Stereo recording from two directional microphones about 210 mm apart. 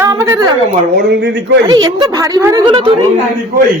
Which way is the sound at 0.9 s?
55° right (ahead or behind).